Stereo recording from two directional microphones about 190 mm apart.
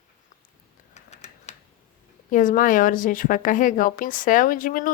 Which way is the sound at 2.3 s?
45° left (ahead or behind).